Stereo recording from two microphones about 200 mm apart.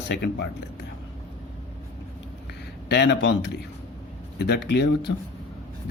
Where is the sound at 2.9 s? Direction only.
55° left (ahead or behind).